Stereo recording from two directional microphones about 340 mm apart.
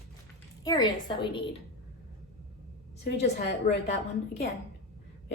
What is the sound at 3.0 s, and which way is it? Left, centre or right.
Speech, left.